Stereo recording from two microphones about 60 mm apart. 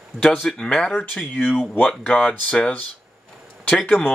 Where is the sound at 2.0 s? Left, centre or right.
Left.